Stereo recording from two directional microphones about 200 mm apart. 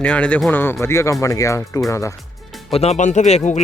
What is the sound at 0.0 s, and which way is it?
Speech, 5° left (ahead or behind).